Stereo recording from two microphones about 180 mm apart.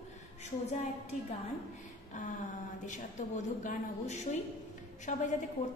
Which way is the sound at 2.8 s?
45° left (ahead or behind).